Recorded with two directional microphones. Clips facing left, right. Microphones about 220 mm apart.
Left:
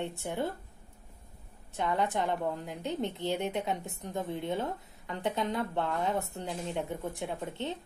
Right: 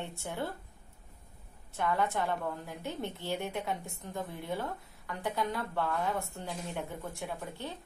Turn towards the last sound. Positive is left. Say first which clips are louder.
# left 4 dB
turn(degrees=20)  # may be behind; listen again after turning